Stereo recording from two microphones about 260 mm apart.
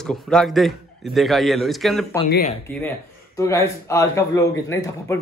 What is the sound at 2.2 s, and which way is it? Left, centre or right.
Speech, left.